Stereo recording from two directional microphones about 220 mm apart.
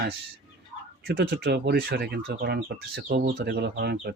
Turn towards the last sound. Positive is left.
turn(degrees=-45)  # may be behind; listen again after turning